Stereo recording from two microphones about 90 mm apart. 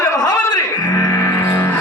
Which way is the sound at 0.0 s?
45° left (ahead or behind).